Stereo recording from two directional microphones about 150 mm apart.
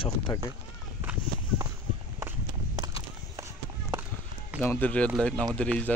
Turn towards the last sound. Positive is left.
turn(degrees=10)  # may be behind; listen again after turning